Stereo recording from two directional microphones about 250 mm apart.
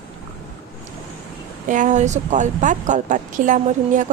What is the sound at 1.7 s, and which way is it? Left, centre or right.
Speech, right.